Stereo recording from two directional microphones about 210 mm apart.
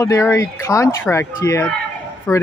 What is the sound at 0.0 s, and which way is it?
A man's voice, 15° left (ahead or behind).